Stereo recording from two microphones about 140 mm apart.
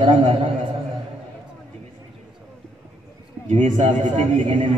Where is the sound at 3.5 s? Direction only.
60° right (ahead or behind).